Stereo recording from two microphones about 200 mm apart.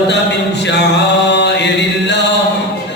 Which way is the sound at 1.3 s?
60° left (ahead or behind).